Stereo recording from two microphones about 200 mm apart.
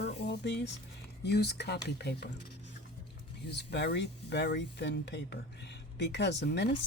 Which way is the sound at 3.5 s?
55° left (ahead or behind).